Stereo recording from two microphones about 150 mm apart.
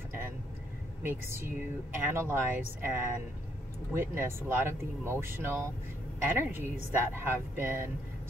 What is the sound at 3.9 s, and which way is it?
Speech, 15° right (ahead or behind).